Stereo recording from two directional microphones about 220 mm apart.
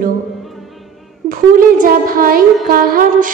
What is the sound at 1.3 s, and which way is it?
A woman's voice, 40° right (ahead or behind).